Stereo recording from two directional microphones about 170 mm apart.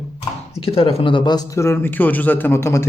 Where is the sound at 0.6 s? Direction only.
35° left (ahead or behind).